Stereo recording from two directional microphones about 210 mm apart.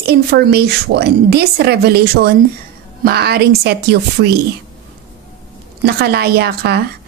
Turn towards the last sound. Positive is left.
turn(degrees=-50)  # may be behind; listen again after turning